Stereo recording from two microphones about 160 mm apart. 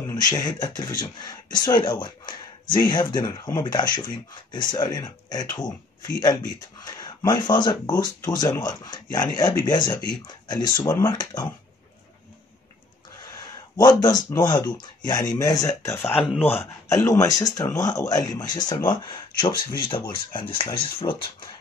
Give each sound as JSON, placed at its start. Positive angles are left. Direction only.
{"t": 0.1, "sound": "speech", "side_deg": 25}
{"t": 13.7, "sound": "speech", "side_deg": 25}